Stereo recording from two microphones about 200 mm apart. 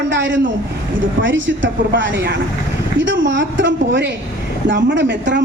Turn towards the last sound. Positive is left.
turn(degrees=-65)  # may be behind; listen again after turning